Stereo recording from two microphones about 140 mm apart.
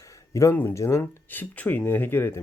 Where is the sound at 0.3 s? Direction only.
15° left (ahead or behind).